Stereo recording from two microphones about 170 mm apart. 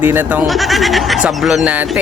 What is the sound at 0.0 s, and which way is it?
Speech, 10° right (ahead or behind).